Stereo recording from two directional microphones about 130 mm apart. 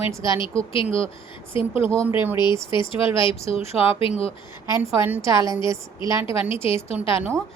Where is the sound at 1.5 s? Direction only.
45° left (ahead or behind).